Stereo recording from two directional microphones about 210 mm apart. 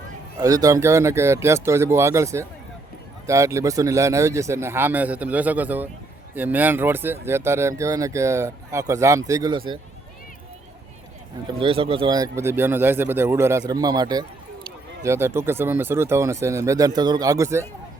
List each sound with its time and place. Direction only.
0.3 s speech: 15° right (ahead or behind)
11.6 s speech: 25° right (ahead or behind)